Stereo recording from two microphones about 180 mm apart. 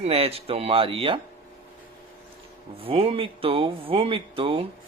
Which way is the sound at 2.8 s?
30° right (ahead or behind).